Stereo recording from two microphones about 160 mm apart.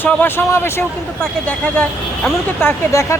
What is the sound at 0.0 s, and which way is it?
Speech, 10° left (ahead or behind).